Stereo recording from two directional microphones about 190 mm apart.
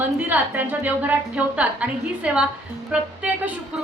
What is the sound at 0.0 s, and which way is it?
A woman's voice, 10° right (ahead or behind).